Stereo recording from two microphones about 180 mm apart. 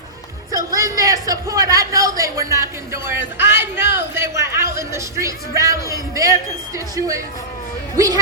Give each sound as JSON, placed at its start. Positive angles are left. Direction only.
{"t": 0.5, "sound": "a man's voice", "side_deg": -20}